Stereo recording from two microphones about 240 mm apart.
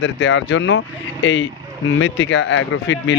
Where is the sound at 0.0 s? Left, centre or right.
Left.